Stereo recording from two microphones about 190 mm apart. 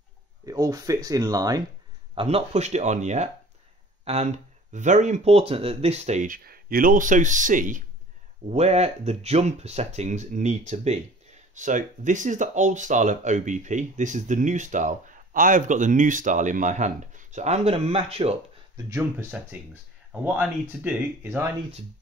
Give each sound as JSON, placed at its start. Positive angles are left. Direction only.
{"t": 0.5, "sound": "speech", "side_deg": -20}
{"t": 2.1, "sound": "speech", "side_deg": -35}
{"t": 18.9, "sound": "speech", "side_deg": -15}